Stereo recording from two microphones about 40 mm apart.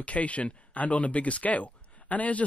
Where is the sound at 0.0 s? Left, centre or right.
Left.